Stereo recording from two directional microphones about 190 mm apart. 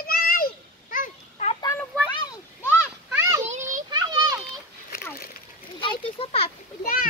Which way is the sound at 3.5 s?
40° right (ahead or behind).